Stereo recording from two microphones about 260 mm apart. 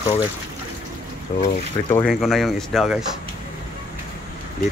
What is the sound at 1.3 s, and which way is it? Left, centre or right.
Speech, left.